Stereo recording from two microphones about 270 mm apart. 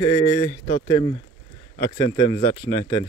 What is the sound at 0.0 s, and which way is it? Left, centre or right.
Speech, centre.